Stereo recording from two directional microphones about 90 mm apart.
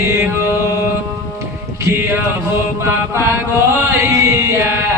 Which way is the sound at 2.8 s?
30° right (ahead or behind).